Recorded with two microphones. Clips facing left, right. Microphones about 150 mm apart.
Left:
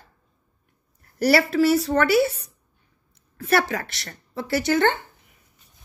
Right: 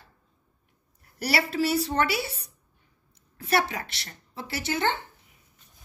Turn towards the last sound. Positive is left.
turn(degrees=55)  # may be behind; listen again after turning